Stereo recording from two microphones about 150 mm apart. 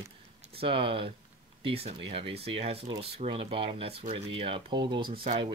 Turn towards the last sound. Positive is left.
turn(degrees=-45)  # may be behind; listen again after turning